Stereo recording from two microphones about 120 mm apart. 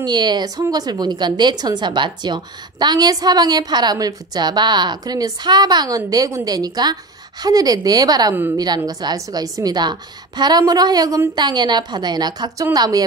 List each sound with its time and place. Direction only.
0.0 s a woman's voice: 35° right (ahead or behind)